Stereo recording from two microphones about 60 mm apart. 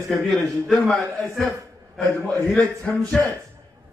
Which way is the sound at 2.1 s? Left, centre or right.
Left.